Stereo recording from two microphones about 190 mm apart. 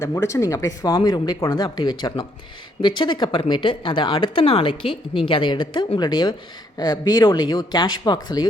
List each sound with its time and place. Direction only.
0.0 s speech: 15° left (ahead or behind)